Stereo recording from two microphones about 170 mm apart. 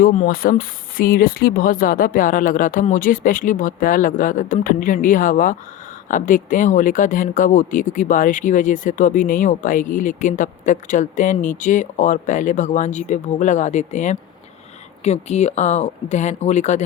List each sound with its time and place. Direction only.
0.0 s speech: 55° left (ahead or behind)